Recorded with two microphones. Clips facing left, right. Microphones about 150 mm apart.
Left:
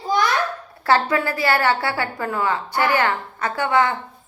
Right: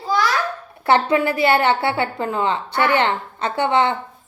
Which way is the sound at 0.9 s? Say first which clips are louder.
Right 2 dB; 20° right (ahead or behind).